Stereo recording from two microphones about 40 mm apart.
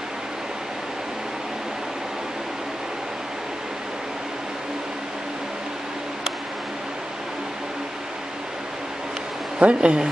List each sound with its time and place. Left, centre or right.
9.6 s speech: right